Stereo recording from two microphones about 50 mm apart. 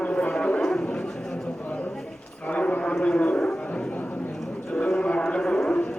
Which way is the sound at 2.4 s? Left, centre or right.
Left.